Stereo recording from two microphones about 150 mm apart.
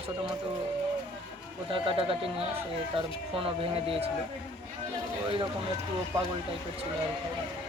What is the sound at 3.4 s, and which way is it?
Speech, 40° right (ahead or behind).